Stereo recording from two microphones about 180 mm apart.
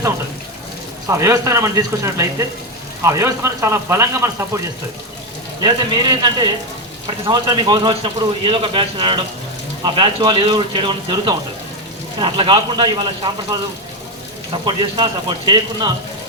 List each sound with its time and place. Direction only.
1.0 s speech: 15° right (ahead or behind)
5.6 s speech: 25° right (ahead or behind)